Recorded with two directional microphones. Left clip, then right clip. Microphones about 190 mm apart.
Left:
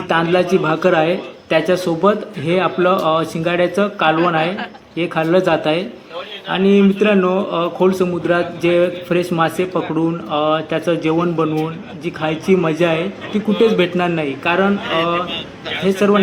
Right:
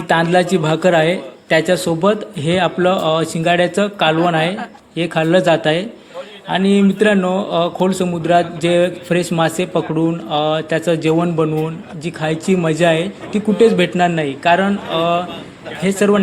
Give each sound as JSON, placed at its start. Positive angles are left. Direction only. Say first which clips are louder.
{"t": 0.1, "sound": "speech", "louder": "right 1 dB", "side_deg": -40}